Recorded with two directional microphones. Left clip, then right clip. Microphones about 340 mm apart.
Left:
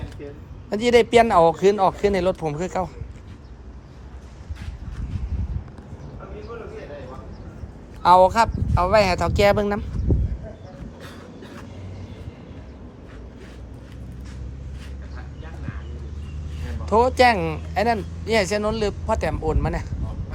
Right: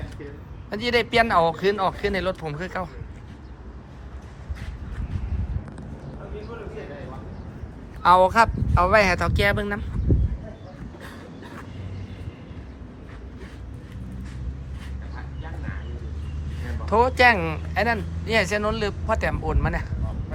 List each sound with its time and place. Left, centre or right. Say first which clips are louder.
0.7 s speech: left 6 dB; left
8.0 s speech: left 2 dB; centre
16.8 s speech: left 1 dB; centre